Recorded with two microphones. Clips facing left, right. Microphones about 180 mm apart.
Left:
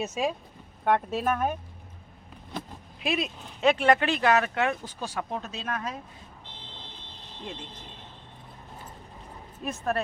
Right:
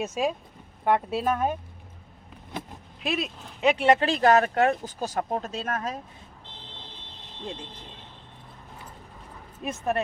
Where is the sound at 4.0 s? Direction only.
35° right (ahead or behind).